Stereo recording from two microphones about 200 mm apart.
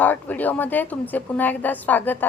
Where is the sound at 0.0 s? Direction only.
10° left (ahead or behind).